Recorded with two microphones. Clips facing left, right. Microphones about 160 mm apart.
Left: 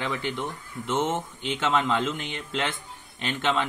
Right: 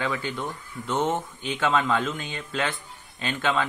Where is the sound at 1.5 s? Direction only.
20° left (ahead or behind).